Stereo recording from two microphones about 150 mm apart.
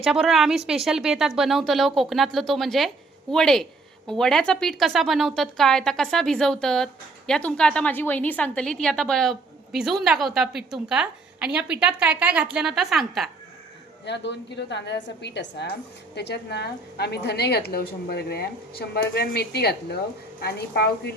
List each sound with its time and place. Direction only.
0.0 s a woman's voice: centre (ahead or behind)
15.4 s a woman's voice: 90° left